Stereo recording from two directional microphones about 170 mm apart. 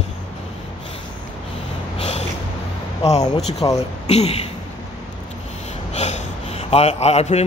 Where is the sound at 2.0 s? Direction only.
40° left (ahead or behind).